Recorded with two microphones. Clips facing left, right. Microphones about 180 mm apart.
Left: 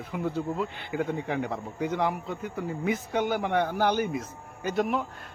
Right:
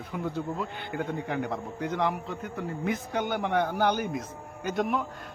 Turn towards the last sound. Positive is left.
turn(degrees=5)  # may be behind; listen again after turning